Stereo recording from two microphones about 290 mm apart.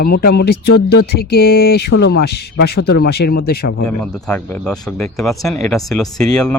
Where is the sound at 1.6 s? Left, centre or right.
Left.